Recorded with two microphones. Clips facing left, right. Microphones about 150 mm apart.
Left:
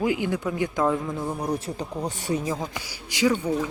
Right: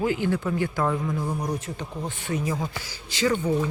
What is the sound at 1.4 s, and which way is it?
Speech, 35° left (ahead or behind).